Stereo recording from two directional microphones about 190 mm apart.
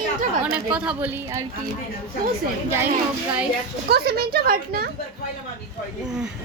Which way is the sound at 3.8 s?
55° right (ahead or behind).